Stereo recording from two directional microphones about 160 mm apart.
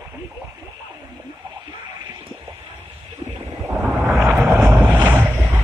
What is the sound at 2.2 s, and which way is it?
Water, 15° right (ahead or behind).